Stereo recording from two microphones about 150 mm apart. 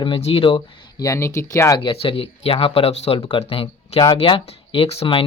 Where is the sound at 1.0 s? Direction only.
20° left (ahead or behind).